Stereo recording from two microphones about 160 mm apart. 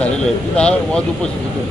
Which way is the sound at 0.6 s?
5° left (ahead or behind).